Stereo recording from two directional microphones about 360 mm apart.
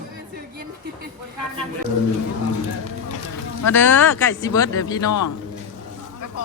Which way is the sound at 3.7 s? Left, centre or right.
Centre.